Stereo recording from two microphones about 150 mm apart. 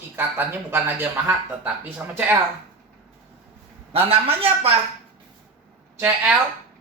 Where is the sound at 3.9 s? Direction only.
40° right (ahead or behind).